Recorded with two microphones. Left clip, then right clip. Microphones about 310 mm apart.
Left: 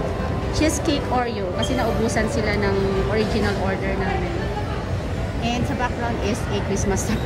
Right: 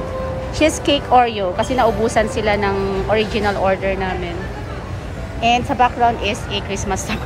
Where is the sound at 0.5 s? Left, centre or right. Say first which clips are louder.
Right 6 dB; centre.